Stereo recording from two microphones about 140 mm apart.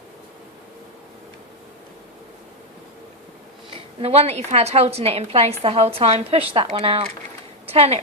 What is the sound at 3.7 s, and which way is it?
A woman's voice, 45° right (ahead or behind).